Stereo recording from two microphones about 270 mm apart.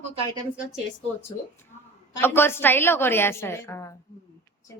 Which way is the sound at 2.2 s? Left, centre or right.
Centre.